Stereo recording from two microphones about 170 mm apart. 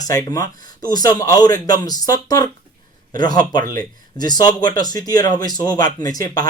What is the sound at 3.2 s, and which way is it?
Speech, 25° left (ahead or behind).